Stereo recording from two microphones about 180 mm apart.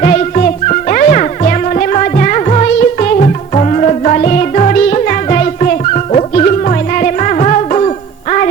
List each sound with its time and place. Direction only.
0.0 s music: 45° left (ahead or behind)